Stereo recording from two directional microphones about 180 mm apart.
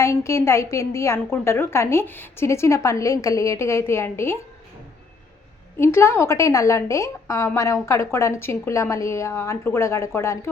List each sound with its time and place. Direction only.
0.0 s a woman's voice: 15° left (ahead or behind)
5.8 s a woman's voice: 15° left (ahead or behind)